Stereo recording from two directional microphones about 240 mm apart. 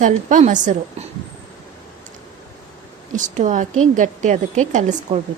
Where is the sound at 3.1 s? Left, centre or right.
Right.